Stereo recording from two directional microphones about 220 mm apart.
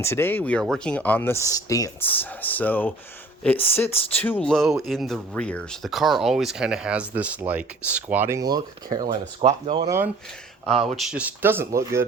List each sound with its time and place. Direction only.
0.0 s speech: 10° left (ahead or behind); by 9.9 s 25° right (ahead or behind)
10.8 s speech: centre (ahead or behind)